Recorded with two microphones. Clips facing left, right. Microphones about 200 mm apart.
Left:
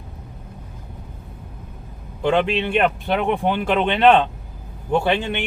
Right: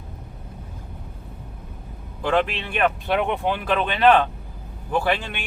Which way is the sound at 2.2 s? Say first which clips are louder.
Left 3 dB; 25° left (ahead or behind).